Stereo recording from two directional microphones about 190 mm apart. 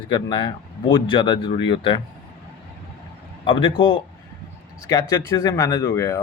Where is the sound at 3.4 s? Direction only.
25° left (ahead or behind).